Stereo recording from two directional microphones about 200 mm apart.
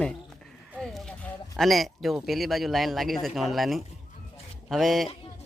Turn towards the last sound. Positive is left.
turn(degrees=0)  # may be behind; listen again after turning